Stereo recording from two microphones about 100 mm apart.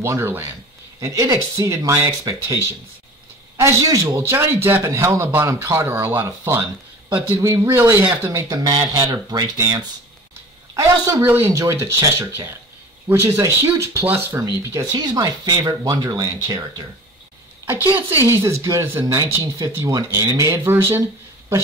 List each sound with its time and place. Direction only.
0.0 s a man's voice: 25° right (ahead or behind)
1.0 s a man's voice: 40° right (ahead or behind)
3.5 s a man's voice: 30° right (ahead or behind)
7.3 s speech: 35° right (ahead or behind)
7.6 s a man's voice: 20° right (ahead or behind)
8.3 s speech: 35° right (ahead or behind)
11.2 s a man's voice: 20° right (ahead or behind)
14.9 s speech: 45° right (ahead or behind)
18.3 s speech: 30° right (ahead or behind)